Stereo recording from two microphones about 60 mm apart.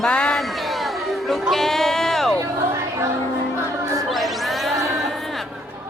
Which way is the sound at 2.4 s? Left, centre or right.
Right.